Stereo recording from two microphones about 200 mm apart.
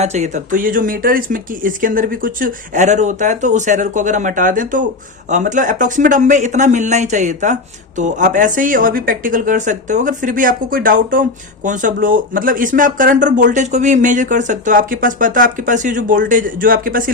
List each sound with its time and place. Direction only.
0.0 s a woman's voice: 35° right (ahead or behind)